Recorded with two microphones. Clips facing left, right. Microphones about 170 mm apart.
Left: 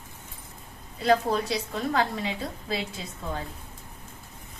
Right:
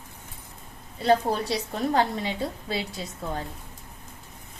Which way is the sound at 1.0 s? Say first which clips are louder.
Right 1 dB; 35° right (ahead or behind).